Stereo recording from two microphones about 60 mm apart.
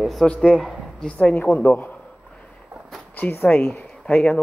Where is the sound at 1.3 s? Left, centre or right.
Left.